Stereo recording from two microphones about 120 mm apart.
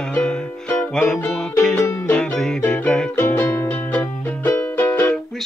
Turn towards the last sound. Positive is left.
turn(degrees=15)  # may be behind; listen again after turning